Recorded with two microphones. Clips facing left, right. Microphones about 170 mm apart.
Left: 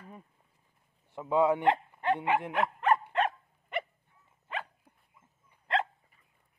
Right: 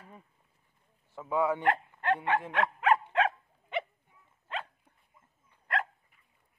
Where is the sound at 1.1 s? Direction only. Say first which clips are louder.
Left 3 dB; 20° left (ahead or behind).